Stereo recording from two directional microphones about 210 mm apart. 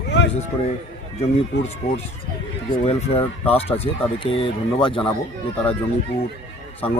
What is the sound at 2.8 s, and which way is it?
Speech, 30° left (ahead or behind).